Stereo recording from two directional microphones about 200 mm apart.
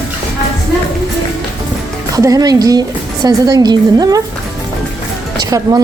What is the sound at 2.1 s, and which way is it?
A woman's voice, 15° right (ahead or behind).